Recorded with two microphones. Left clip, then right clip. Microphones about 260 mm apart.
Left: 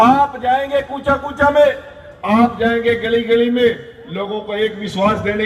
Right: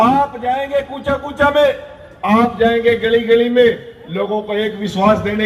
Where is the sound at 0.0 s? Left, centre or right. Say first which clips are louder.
Left 2 dB; left.